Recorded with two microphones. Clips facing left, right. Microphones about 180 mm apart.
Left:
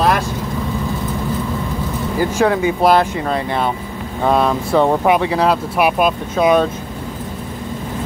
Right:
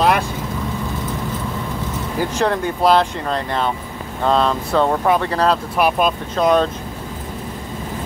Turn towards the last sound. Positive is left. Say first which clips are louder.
# left 2 dB
turn(degrees=10)  # may be behind; listen again after turning